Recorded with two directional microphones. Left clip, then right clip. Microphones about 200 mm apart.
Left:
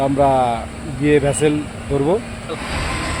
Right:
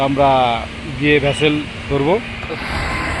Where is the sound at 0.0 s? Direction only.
5° left (ahead or behind).